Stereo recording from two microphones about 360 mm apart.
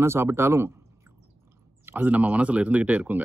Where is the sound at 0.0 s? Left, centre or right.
Centre.